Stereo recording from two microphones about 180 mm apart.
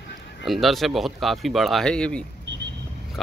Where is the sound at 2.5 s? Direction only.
85° right.